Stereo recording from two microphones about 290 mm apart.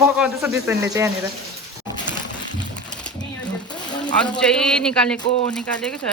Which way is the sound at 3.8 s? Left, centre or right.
Centre.